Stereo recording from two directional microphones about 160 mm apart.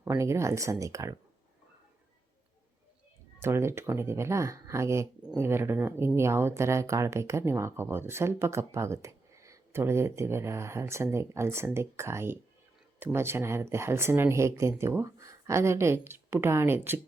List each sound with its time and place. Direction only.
0.0 s speech: 15° right (ahead or behind)
3.4 s speech: 15° right (ahead or behind)